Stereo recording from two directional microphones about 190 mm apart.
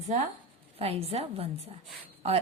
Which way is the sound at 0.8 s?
30° right (ahead or behind).